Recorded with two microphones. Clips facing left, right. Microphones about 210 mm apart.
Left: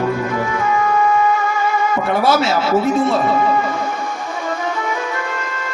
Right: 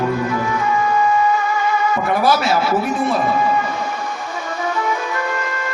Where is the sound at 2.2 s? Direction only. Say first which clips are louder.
Left 1 dB; 25° left (ahead or behind).